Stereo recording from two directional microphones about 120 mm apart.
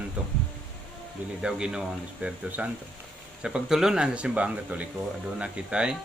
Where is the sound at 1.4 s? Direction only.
5° right (ahead or behind).